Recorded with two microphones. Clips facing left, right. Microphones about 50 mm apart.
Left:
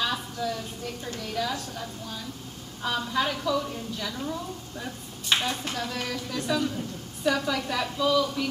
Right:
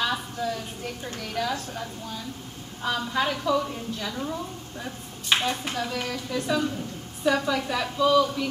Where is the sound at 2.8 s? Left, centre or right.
Centre.